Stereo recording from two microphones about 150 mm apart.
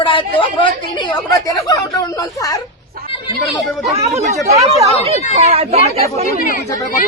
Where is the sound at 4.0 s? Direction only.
50° right (ahead or behind).